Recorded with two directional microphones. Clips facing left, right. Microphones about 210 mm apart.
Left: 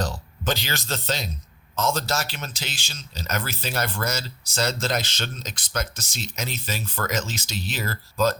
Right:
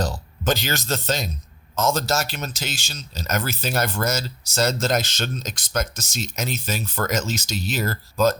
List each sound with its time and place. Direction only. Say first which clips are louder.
0.0 s speech: right 3 dB; 45° right (ahead or behind)